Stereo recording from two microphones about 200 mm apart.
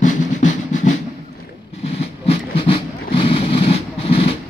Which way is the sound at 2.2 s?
30° left (ahead or behind).